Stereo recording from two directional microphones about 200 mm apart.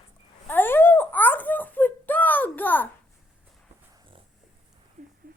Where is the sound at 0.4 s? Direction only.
10° left (ahead or behind).